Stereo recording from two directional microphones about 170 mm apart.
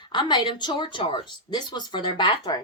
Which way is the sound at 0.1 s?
25° left (ahead or behind).